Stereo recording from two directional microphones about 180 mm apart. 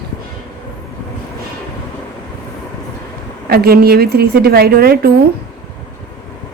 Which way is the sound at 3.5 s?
60° right (ahead or behind).